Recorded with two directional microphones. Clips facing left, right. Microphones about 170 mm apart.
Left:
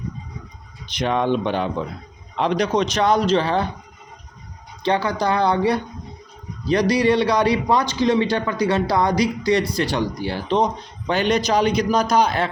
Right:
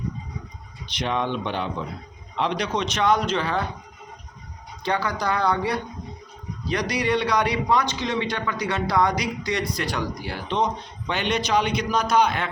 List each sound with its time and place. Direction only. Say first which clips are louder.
0.9 s a man's voice: left 6 dB; 45° left (ahead or behind)
4.8 s a man's voice: left 5 dB; 30° left (ahead or behind)